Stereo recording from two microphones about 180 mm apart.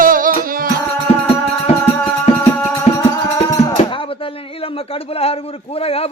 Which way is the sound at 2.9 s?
20° left (ahead or behind).